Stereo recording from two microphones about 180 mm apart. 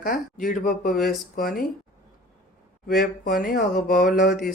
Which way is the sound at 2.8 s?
60° left (ahead or behind).